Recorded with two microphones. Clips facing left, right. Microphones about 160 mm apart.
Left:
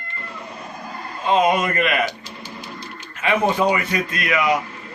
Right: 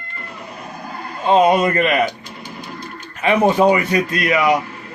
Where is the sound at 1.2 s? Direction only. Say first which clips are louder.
Right 4 dB; 35° right (ahead or behind).